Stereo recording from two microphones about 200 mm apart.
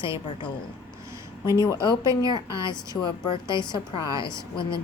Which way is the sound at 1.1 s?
15° right (ahead or behind).